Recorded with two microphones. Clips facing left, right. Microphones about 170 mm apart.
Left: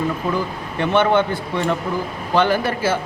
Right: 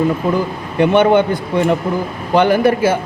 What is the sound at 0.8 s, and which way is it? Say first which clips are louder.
Speech: right 5 dB; 15° right (ahead or behind).